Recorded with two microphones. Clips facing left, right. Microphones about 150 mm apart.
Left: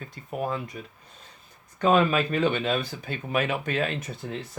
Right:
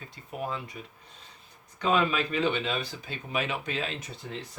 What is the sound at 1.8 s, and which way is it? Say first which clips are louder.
Speech: left 5 dB; 50° left (ahead or behind).